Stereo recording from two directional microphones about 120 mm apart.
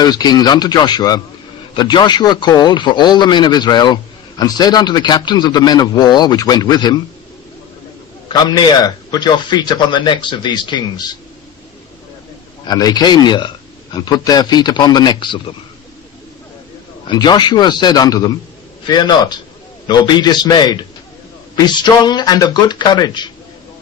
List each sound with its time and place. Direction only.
0.0 s a man's voice: 35° left (ahead or behind)
8.3 s a man's voice: 35° left (ahead or behind)
12.6 s a man's voice: 35° left (ahead or behind)
17.1 s a man's voice: 40° left (ahead or behind)